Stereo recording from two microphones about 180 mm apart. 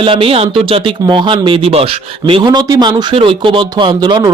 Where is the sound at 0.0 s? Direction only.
30° right (ahead or behind).